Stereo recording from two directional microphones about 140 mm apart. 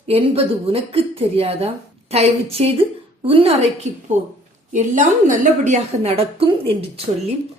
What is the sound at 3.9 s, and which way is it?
A woman's voice, 55° right (ahead or behind).